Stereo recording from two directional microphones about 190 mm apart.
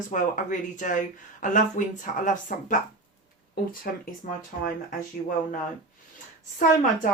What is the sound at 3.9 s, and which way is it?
Speech, 55° left (ahead or behind).